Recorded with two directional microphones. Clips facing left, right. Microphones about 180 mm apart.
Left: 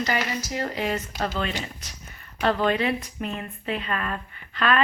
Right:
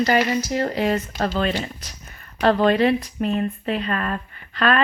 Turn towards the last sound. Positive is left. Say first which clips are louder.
# right 3 dB
turn(degrees=-40)  # may be behind; listen again after turning